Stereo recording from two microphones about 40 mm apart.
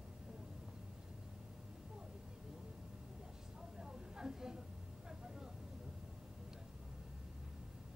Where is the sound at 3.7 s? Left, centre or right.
Centre.